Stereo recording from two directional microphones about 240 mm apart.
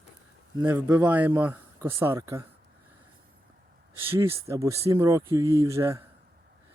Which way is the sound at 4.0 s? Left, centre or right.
Centre.